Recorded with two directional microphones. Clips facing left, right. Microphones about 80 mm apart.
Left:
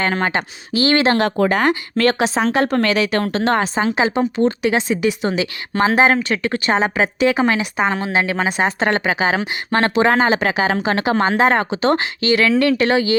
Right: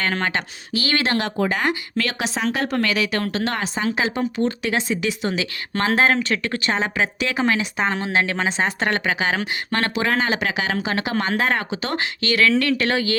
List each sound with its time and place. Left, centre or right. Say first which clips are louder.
0.0 s speech: left 4 dB; left
1.2 s speech: left 6 dB; left
7.8 s speech: left 3 dB; centre
8.8 s speech: left 5 dB; left